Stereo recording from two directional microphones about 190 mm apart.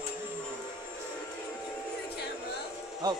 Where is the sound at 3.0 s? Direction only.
20° right (ahead or behind).